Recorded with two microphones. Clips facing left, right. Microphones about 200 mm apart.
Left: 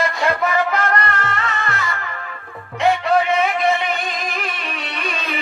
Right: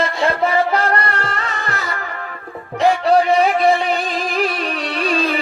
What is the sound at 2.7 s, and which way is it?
Music, 35° right (ahead or behind).